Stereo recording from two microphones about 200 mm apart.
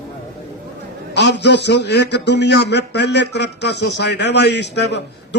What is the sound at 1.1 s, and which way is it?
A man's voice, 60° left (ahead or behind).